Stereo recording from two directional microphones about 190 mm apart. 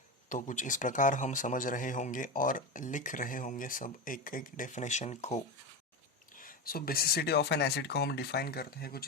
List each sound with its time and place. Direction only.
0.3 s a man's voice: 40° left (ahead or behind)
6.3 s speech: 45° left (ahead or behind)